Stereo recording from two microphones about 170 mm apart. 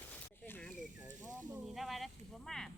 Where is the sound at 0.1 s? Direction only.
10° left (ahead or behind).